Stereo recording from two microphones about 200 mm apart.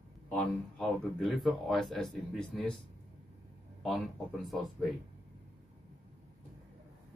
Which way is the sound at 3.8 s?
Centre (ahead or behind).